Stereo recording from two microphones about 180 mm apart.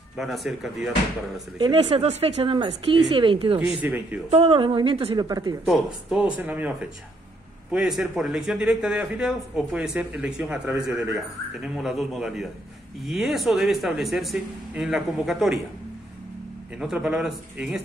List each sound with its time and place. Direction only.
0.1 s speech: centre (ahead or behind)
1.6 s a woman's voice: 30° right (ahead or behind)
3.8 s speech: 10° right (ahead or behind)
4.3 s a woman's voice: 35° right (ahead or behind)
5.7 s speech: 5° right (ahead or behind)
16.7 s speech: 5° right (ahead or behind)